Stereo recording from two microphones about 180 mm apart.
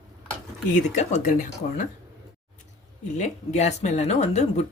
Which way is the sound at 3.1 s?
40° left (ahead or behind).